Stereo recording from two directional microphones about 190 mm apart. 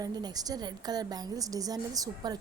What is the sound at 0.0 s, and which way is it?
A woman's voice, 20° right (ahead or behind).